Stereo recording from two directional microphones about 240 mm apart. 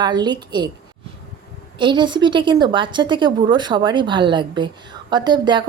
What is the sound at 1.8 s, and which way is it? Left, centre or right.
A woman's voice, centre.